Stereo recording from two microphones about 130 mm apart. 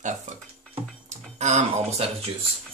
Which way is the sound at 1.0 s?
60° right (ahead or behind).